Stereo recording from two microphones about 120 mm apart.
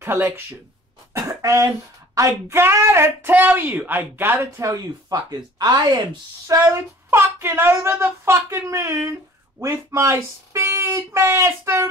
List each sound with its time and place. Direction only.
0.0 s speech: 20° right (ahead or behind)